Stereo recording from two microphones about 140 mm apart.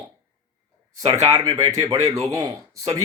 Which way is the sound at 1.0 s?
30° right (ahead or behind).